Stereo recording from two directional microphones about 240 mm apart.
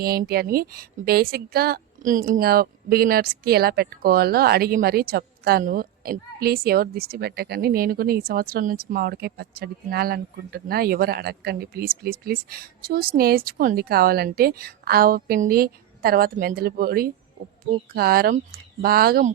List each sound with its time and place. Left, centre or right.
0.0 s a woman's voice: right